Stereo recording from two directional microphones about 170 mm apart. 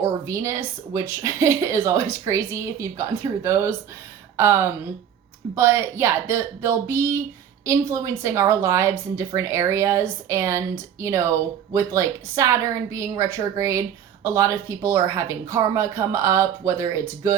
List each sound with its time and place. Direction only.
0.0 s a woman's voice: 15° right (ahead or behind)